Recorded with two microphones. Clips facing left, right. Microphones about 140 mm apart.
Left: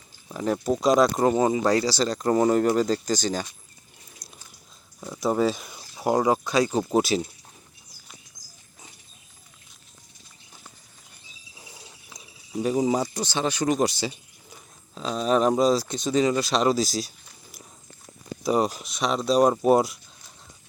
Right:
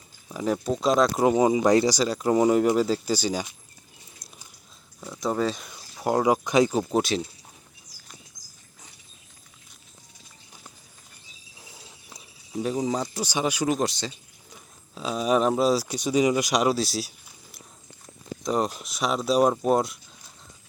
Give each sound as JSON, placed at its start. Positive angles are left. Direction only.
{"t": 0.3, "sound": "speech", "side_deg": 0}
{"t": 1.2, "sound": "speech", "side_deg": -10}
{"t": 2.0, "sound": "speech", "side_deg": -10}
{"t": 4.9, "sound": "speech", "side_deg": 10}
{"t": 6.2, "sound": "speech", "side_deg": -15}
{"t": 6.7, "sound": "speech", "side_deg": 0}
{"t": 11.6, "sound": "a sound", "side_deg": 0}
{"t": 13.2, "sound": "speech", "side_deg": -10}
{"t": 13.7, "sound": "speech", "side_deg": 5}
{"t": 18.4, "sound": "speech", "side_deg": 5}